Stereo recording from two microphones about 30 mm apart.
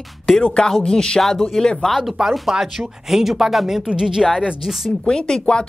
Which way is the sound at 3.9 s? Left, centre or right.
Right.